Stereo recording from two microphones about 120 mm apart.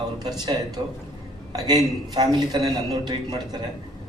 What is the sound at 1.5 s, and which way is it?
A man's voice, 35° right (ahead or behind).